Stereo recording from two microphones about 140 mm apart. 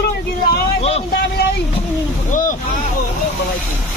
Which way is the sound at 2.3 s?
70° left (ahead or behind).